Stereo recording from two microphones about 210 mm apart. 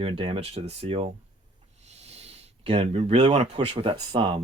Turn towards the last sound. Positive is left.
turn(degrees=-25)  # may be behind; listen again after turning